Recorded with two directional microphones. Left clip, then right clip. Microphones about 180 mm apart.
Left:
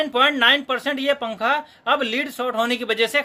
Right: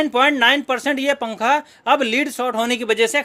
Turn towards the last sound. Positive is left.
turn(degrees=-40)  # may be behind; listen again after turning